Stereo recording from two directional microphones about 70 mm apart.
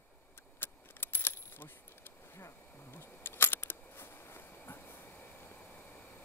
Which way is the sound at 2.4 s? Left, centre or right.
Left.